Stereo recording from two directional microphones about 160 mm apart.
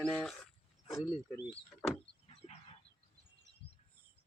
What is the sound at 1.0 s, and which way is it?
Speech, 25° left (ahead or behind).